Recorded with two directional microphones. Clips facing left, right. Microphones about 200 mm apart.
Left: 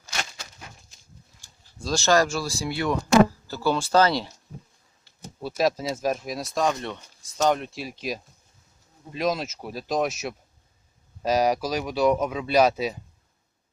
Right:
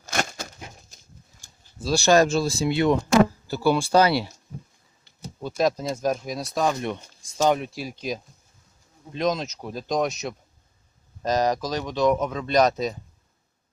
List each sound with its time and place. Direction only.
0.0 s a sound: 50° right (ahead or behind)
1.8 s speech: 10° right (ahead or behind)
5.4 s speech: 5° left (ahead or behind)